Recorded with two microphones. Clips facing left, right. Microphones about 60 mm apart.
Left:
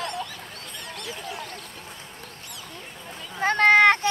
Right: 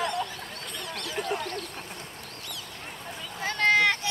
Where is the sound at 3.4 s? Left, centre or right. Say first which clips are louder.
Left 6 dB; left.